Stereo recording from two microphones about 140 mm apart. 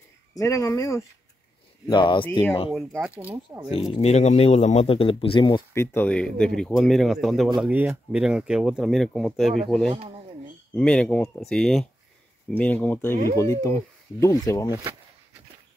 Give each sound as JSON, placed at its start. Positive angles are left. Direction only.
{"t": 0.3, "sound": "speech", "side_deg": 25}
{"t": 1.9, "sound": "speech", "side_deg": 35}
{"t": 3.5, "sound": "speech", "side_deg": -20}
{"t": 3.9, "sound": "speech", "side_deg": 50}
{"t": 5.7, "sound": "speech", "side_deg": 20}
{"t": 6.0, "sound": "speech", "side_deg": 5}
{"t": 7.7, "sound": "speech", "side_deg": -15}